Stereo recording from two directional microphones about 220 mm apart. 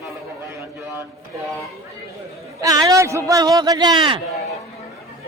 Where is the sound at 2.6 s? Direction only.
15° right (ahead or behind).